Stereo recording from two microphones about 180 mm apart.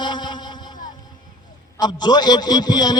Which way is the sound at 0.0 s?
25° left (ahead or behind).